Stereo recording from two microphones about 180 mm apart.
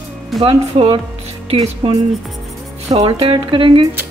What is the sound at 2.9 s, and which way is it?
Speech, 30° right (ahead or behind).